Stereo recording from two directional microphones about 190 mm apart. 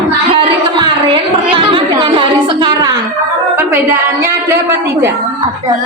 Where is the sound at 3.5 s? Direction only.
10° right (ahead or behind).